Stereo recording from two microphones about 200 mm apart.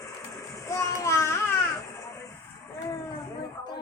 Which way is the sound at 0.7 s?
15° left (ahead or behind).